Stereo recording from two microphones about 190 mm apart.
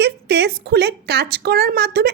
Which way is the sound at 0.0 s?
60° right (ahead or behind).